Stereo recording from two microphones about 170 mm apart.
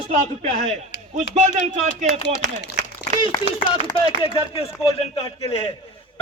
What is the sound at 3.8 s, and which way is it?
A man's voice, 35° left (ahead or behind).